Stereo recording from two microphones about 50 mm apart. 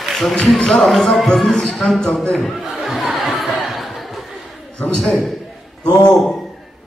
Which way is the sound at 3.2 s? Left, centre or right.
Centre.